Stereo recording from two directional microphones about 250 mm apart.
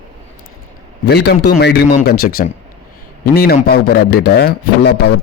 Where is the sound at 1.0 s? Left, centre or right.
Left.